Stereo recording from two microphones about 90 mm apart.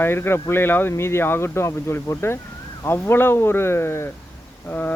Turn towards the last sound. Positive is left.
turn(degrees=20)  # may be behind; listen again after turning